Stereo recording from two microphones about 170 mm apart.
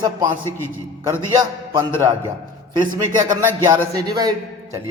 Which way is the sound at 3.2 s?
20° right (ahead or behind).